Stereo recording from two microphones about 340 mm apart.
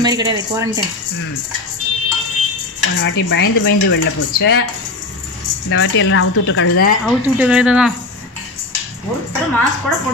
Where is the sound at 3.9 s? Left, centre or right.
Left.